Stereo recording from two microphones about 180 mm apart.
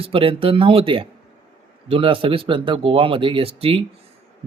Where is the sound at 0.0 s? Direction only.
30° right (ahead or behind).